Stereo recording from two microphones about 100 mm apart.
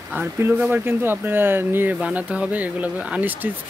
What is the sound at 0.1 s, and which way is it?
Speech, 20° right (ahead or behind).